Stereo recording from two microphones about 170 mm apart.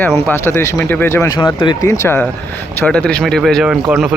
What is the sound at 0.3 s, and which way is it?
Speech, 15° left (ahead or behind).